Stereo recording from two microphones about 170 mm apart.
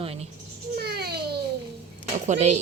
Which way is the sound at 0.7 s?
70° right (ahead or behind).